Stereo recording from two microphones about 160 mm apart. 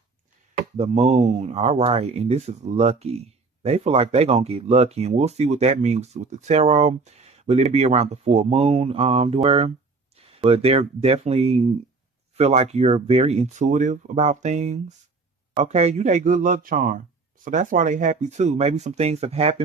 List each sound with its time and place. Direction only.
0.5 s speech: 45° right (ahead or behind)